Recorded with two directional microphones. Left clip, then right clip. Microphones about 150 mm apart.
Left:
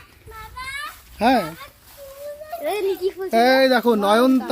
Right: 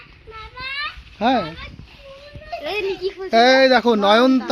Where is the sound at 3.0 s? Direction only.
35° left (ahead or behind).